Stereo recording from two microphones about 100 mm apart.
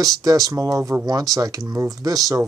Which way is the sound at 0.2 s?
35° right (ahead or behind).